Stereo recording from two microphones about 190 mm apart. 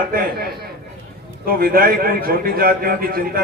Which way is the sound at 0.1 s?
55° right (ahead or behind).